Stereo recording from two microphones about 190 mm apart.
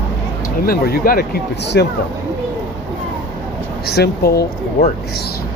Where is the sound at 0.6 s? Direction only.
50° left (ahead or behind).